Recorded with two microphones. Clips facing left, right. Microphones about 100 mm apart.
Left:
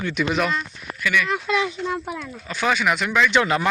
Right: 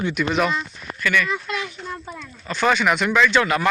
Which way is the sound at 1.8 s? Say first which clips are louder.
Left 6 dB; 70° left (ahead or behind).